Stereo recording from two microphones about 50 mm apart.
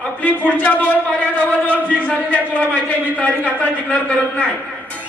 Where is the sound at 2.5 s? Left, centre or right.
Left.